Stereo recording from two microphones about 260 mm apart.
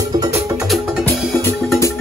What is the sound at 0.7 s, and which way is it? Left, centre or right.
Music, centre.